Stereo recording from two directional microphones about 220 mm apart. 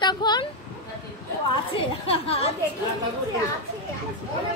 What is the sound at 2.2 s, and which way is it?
Speech, 25° left (ahead or behind).